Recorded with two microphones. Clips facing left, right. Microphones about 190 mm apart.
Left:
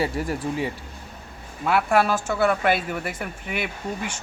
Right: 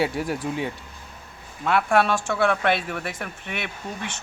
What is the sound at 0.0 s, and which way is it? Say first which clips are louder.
Speech: even; centre (ahead or behind).